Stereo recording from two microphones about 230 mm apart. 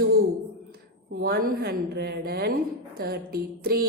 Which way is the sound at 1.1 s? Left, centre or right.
Right.